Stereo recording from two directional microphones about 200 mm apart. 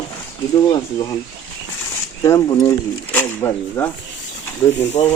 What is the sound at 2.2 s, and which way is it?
Speech, 15° left (ahead or behind).